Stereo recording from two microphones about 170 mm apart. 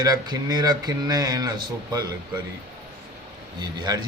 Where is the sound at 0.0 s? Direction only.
25° right (ahead or behind).